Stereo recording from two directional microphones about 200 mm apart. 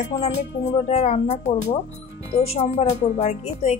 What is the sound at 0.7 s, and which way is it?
Speech, 35° left (ahead or behind).